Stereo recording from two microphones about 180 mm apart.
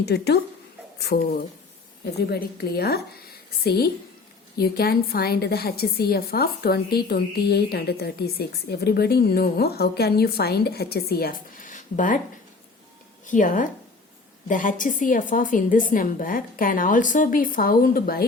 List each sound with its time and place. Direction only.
0.0 s a woman's voice: 65° left (ahead or behind); by 12.2 s 45° left (ahead or behind)
13.2 s a woman's voice: 45° left (ahead or behind)